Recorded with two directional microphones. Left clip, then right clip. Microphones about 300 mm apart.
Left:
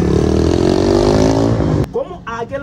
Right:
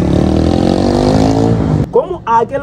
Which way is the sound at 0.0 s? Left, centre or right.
Right.